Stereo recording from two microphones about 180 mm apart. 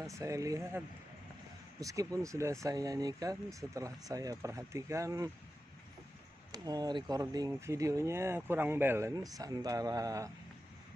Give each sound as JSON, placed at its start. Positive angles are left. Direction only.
{"t": 0.0, "sound": "speech", "side_deg": -15}
{"t": 6.5, "sound": "speech", "side_deg": -20}